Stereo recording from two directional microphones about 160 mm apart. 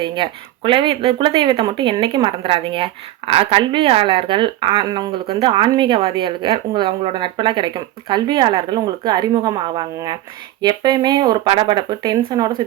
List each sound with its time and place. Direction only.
0.0 s speech: 30° right (ahead or behind)